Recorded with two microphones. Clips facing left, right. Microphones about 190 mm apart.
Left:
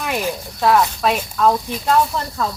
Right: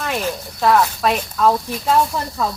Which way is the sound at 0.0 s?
10° left (ahead or behind).